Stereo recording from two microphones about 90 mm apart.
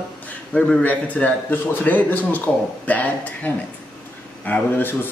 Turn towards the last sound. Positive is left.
turn(degrees=20)  # may be behind; listen again after turning